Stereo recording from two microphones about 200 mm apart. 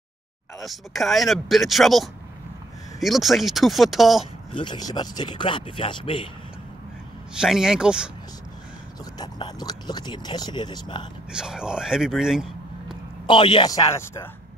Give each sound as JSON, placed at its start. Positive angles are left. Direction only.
{"t": 0.6, "sound": "speech", "side_deg": 0}
{"t": 4.5, "sound": "speech", "side_deg": 25}
{"t": 7.3, "sound": "speech", "side_deg": -5}
{"t": 9.2, "sound": "speech", "side_deg": 20}
{"t": 11.3, "sound": "speech", "side_deg": -5}
{"t": 13.3, "sound": "speech", "side_deg": 25}